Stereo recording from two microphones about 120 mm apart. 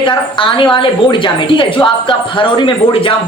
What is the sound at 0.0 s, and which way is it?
A woman's voice, 45° left (ahead or behind).